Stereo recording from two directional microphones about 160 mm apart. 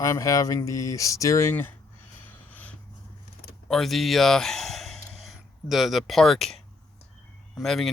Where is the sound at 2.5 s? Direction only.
10° left (ahead or behind).